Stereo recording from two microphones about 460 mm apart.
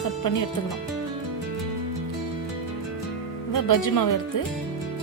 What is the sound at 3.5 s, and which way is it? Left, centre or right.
Speech, left.